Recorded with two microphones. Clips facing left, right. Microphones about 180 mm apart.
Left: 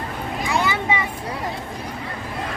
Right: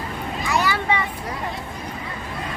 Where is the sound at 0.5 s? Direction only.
20° left (ahead or behind).